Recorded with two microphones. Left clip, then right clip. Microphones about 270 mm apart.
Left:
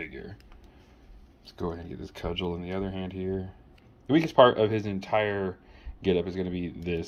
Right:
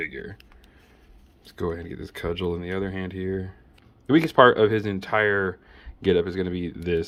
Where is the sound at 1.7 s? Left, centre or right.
Centre.